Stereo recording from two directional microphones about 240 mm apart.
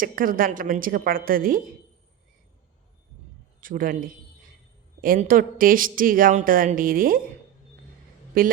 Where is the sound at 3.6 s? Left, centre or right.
Right.